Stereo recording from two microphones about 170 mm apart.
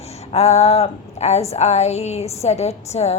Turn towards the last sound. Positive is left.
turn(degrees=40)  # may be behind; listen again after turning